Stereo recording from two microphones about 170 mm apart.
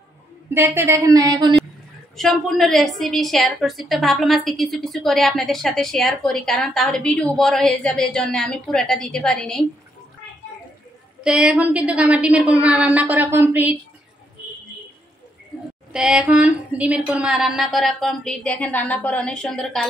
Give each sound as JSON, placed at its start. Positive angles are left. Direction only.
{"t": 0.5, "sound": "a woman's voice", "side_deg": -15}
{"t": 2.1, "sound": "a woman's voice", "side_deg": 0}
{"t": 11.2, "sound": "a woman's voice", "side_deg": -5}
{"t": 15.9, "sound": "a woman's voice", "side_deg": -5}